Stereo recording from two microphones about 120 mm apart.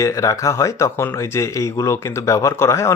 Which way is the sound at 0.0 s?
25° left (ahead or behind).